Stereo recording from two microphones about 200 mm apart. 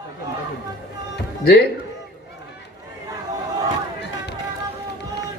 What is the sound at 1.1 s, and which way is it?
Music, 55° left (ahead or behind).